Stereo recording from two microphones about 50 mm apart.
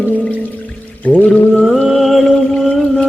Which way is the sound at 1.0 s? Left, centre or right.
Left.